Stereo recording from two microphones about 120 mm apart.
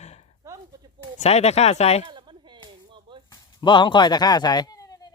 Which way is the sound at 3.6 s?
40° left (ahead or behind).